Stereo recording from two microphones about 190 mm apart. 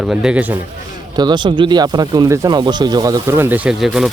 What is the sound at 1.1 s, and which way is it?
Speech, 20° right (ahead or behind).